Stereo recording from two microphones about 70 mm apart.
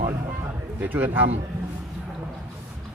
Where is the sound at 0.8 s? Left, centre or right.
Right.